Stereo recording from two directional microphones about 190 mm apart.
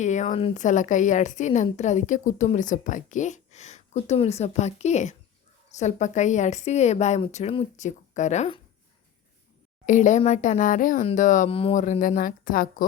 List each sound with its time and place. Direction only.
0.0 s a woman's voice: 40° left (ahead or behind)
9.8 s a woman's voice: 40° left (ahead or behind)